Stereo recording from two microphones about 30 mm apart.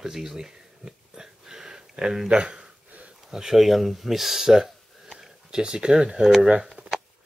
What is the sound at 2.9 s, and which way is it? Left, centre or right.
Sniff, right.